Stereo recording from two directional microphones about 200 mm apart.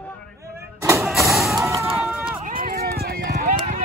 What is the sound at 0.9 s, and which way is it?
Vehicle, centre (ahead or behind).